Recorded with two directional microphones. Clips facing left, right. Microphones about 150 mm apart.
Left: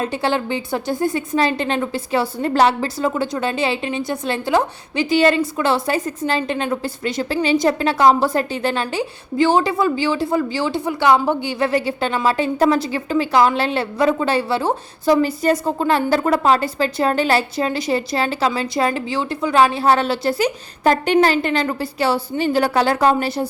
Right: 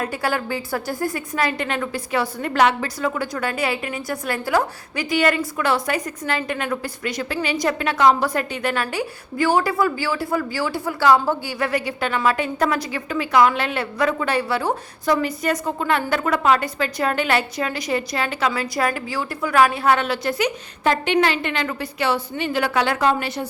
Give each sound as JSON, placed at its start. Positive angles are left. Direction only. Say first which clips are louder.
{"t": 0.0, "sound": "a woman's voice", "louder": "left 3 dB", "side_deg": 25}